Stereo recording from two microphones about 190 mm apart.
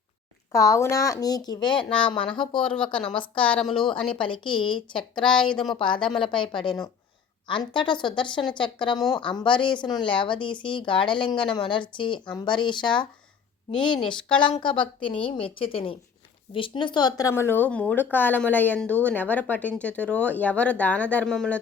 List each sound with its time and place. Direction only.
0.5 s speech: 15° left (ahead or behind)
1.9 s a woman's voice: 5° left (ahead or behind)
2.1 s speech: 25° left (ahead or behind)
3.2 s a woman's voice: 5° left (ahead or behind)
4.2 s speech: 25° left (ahead or behind)
5.4 s a woman's voice: 5° left (ahead or behind)
5.8 s speech: 25° left (ahead or behind); by 21.6 s 5° left (ahead or behind)